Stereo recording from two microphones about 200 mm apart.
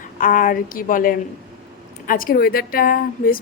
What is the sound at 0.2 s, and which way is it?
A woman's voice, 45° left (ahead or behind).